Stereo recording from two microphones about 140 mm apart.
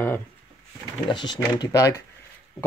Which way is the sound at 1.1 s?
35° left (ahead or behind).